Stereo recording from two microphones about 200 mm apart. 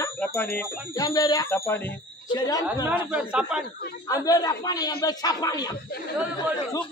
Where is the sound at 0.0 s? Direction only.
10° left (ahead or behind).